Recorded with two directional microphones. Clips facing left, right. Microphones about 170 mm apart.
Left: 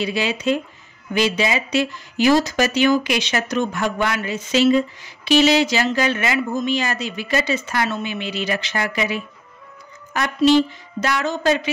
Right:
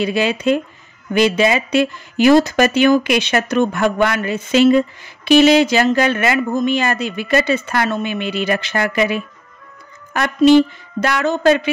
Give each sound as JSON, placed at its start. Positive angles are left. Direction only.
{"t": 0.0, "sound": "speech", "side_deg": -55}